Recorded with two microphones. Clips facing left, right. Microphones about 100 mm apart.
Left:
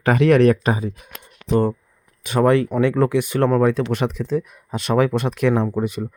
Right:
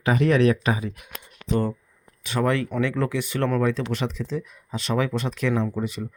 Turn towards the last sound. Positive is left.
turn(degrees=50)  # may be behind; listen again after turning